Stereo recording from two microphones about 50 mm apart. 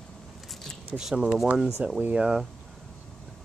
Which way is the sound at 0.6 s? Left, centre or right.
Centre.